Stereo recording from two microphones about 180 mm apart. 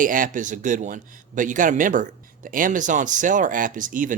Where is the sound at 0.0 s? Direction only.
50° right (ahead or behind).